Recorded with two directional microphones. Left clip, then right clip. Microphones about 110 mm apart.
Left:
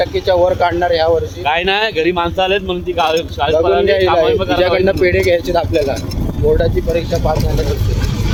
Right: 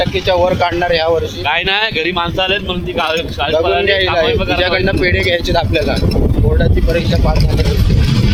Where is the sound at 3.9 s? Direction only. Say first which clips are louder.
Left 1 dB; 90° left.